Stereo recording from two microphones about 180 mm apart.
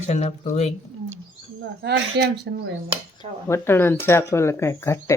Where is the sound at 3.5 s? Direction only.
15° left (ahead or behind).